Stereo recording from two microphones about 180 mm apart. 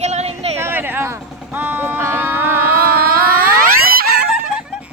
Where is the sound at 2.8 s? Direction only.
55° right (ahead or behind).